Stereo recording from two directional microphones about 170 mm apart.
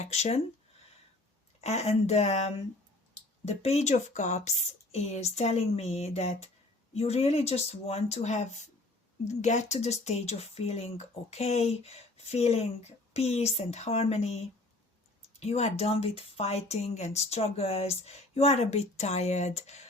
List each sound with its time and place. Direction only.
0.0 s speech: 40° left (ahead or behind)
1.6 s speech: 40° left (ahead or behind)
15.4 s speech: 40° left (ahead or behind)